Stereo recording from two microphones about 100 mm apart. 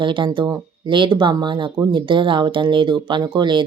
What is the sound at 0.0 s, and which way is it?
Speech, 55° right (ahead or behind).